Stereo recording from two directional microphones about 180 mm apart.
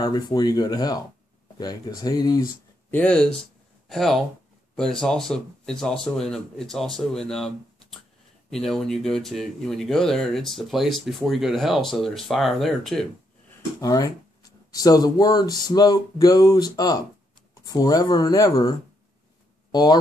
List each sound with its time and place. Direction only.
0.0 s speech: 25° left (ahead or behind)
2.9 s speech: 5° left (ahead or behind)
13.7 s speech: 20° left (ahead or behind)